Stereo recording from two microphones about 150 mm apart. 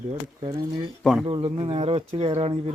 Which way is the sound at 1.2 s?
35° right (ahead or behind).